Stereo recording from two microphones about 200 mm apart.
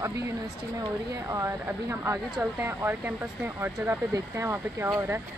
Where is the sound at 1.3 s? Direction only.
15° right (ahead or behind).